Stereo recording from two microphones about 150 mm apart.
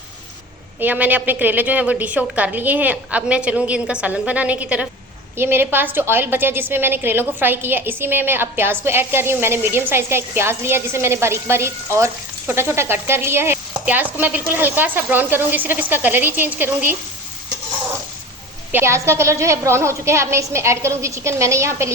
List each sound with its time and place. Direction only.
0.8 s a woman's voice: 10° right (ahead or behind)
18.7 s a woman's voice: 15° right (ahead or behind)